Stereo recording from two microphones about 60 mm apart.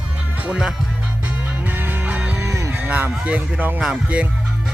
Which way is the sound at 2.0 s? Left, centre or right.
Right.